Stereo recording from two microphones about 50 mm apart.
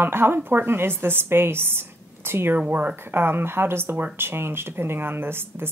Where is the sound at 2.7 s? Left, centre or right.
Right.